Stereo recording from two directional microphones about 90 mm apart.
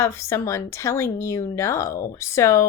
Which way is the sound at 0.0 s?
30° left (ahead or behind).